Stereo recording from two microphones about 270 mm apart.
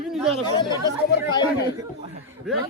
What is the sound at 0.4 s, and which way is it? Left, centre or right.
Speech, centre.